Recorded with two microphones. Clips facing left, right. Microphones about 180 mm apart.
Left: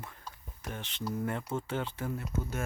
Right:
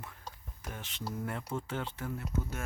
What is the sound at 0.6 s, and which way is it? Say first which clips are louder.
Speech: left 4 dB; centre (ahead or behind).